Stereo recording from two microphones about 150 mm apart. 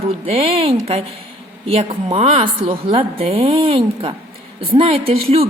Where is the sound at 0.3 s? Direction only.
40° right (ahead or behind).